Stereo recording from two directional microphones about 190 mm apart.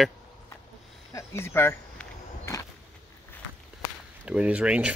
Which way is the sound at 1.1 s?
15° left (ahead or behind).